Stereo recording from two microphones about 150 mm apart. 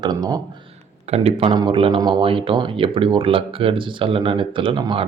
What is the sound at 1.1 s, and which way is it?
Speech, 40° right (ahead or behind).